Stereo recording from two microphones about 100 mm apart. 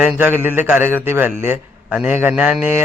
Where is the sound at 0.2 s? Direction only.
20° right (ahead or behind).